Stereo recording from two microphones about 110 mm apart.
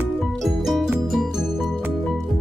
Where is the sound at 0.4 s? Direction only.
Centre (ahead or behind).